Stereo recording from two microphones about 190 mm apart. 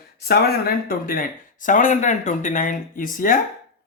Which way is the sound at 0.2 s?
55° left (ahead or behind).